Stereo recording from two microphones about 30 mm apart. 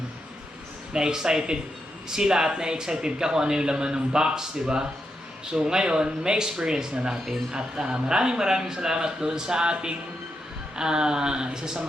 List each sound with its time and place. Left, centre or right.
0.9 s speech: right
5.5 s speech: right